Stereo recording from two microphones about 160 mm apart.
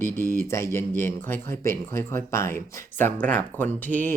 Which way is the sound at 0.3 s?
15° left (ahead or behind).